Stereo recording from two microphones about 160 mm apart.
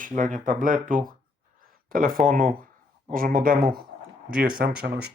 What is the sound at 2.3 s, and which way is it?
Speech, 60° right (ahead or behind).